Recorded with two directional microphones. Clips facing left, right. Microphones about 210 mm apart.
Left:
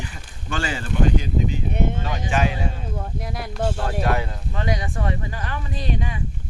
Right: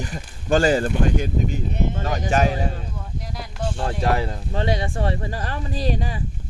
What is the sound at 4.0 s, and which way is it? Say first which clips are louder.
A man's voice: right 4 dB; 30° right (ahead or behind).